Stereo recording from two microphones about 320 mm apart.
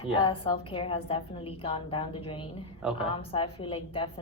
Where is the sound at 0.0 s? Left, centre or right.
Centre.